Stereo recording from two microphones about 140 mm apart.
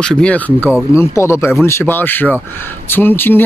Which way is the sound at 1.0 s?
20° left (ahead or behind).